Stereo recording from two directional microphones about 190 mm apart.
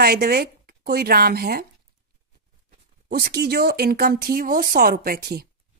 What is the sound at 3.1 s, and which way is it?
A woman's voice, 55° right (ahead or behind).